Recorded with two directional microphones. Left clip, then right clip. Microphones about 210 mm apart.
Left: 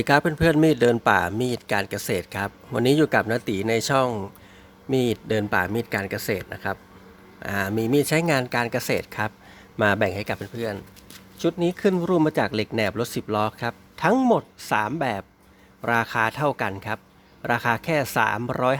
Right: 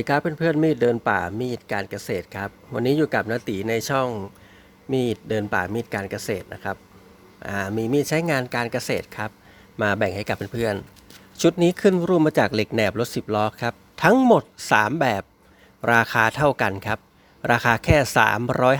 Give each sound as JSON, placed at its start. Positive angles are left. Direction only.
{"t": 0.0, "sound": "speech", "side_deg": 5}
{"t": 10.5, "sound": "speech", "side_deg": -30}